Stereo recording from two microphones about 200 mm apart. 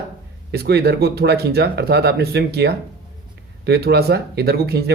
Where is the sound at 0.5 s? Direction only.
55° right (ahead or behind).